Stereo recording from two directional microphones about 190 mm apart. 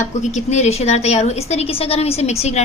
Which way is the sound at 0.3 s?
35° left (ahead or behind).